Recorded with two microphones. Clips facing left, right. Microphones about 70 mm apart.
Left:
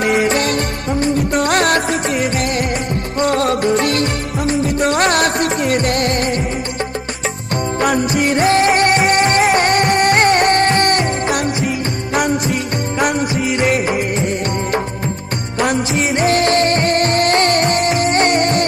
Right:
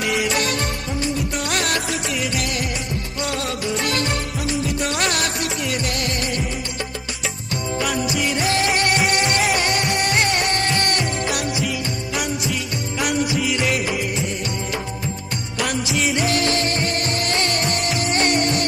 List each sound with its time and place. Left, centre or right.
0.0 s music: left
7.8 s music: left
13.0 s music of bollywood: left
15.6 s music: left